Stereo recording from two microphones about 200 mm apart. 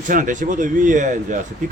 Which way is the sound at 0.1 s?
40° right (ahead or behind).